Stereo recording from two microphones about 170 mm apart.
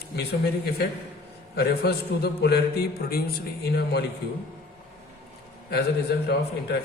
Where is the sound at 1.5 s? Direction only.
70° left (ahead or behind).